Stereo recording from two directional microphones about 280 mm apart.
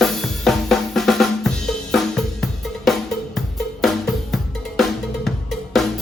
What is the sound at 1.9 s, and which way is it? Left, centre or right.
Drum, centre.